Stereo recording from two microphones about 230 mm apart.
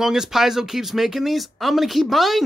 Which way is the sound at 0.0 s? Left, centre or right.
Centre.